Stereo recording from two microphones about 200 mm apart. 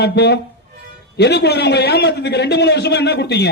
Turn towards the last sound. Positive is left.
turn(degrees=55)  # may be behind; listen again after turning